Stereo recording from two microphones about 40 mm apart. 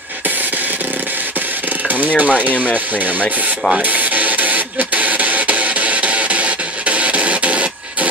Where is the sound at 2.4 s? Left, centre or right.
Right.